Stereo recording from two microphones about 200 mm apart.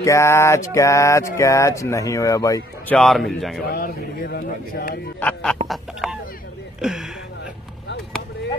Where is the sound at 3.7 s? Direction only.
50° left (ahead or behind).